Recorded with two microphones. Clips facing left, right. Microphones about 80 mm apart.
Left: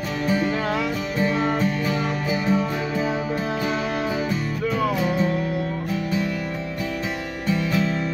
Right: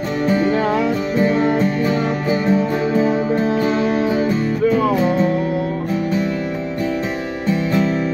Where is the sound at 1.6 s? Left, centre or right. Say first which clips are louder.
Right 6 dB; right.